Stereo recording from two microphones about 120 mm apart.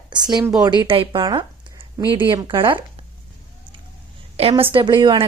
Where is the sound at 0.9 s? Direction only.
45° right (ahead or behind).